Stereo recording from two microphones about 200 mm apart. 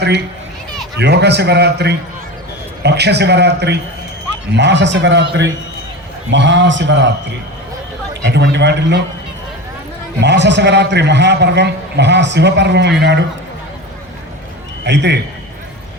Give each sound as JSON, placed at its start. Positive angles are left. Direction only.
{"t": 0.9, "sound": "a man's voice", "side_deg": -55}
{"t": 6.3, "sound": "a man's voice", "side_deg": -65}
{"t": 8.2, "sound": "a man's voice", "side_deg": -60}
{"t": 10.2, "sound": "a man's voice", "side_deg": -60}
{"t": 14.8, "sound": "a man's voice", "side_deg": -60}